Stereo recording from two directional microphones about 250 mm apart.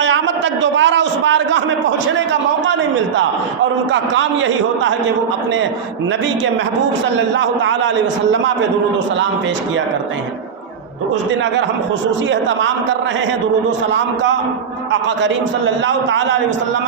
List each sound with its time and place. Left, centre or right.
0.0 s a man's voice: right
7.3 s a man's voice: right
12.3 s a man's voice: right